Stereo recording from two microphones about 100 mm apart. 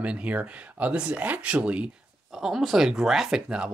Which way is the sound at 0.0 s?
10° right (ahead or behind).